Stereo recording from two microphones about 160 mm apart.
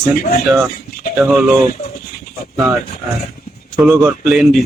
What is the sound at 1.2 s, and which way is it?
Speech, 10° right (ahead or behind).